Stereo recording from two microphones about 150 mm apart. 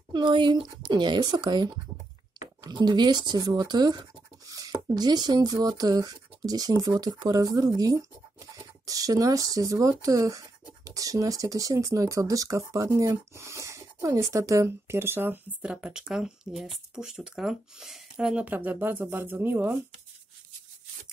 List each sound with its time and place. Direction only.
0.1 s speech: 30° right (ahead or behind); by 19.8 s 15° right (ahead or behind)